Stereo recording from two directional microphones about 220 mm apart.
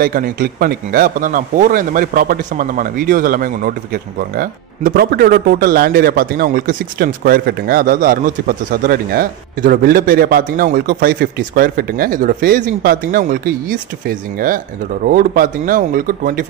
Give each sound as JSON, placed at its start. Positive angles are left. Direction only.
{"t": 0.0, "sound": "speech", "side_deg": -40}